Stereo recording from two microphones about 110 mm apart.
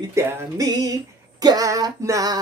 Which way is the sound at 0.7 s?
35° right (ahead or behind).